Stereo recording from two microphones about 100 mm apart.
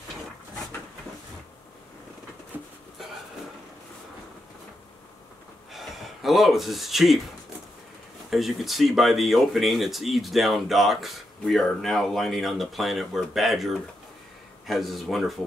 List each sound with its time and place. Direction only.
2.5 s a sound: 15° right (ahead or behind)
5.7 s gasp: centre (ahead or behind)
8.3 s speech: centre (ahead or behind)